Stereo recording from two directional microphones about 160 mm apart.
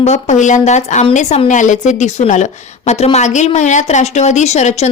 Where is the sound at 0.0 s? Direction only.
45° left (ahead or behind).